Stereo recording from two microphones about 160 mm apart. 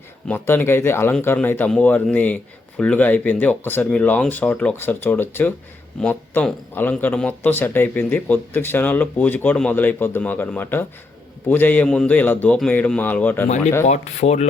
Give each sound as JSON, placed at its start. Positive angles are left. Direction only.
{"t": 0.3, "sound": "a man's voice", "side_deg": 15}
{"t": 13.8, "sound": "speech", "side_deg": 45}